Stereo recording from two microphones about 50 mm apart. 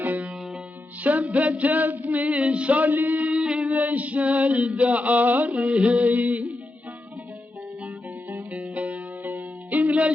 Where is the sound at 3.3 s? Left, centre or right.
Right.